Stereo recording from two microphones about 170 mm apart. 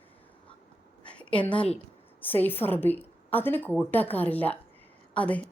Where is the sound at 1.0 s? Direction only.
5° left (ahead or behind).